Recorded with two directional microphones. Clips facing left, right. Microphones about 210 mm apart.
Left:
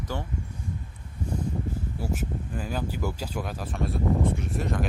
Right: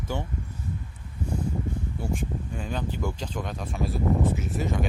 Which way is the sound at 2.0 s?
5° left (ahead or behind).